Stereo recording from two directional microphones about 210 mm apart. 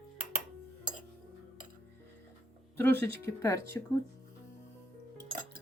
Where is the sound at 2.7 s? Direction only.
10° left (ahead or behind).